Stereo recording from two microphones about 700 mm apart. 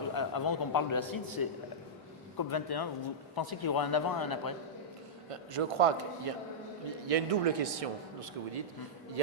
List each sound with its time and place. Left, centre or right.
0.1 s a man's voice: left
2.5 s a man's voice: left
5.3 s a man's voice: right